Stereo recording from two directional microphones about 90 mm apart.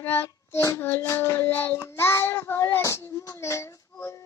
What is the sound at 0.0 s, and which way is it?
Child singing, 25° left (ahead or behind).